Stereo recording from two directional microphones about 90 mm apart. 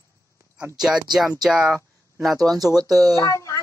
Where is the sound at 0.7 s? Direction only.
5° right (ahead or behind).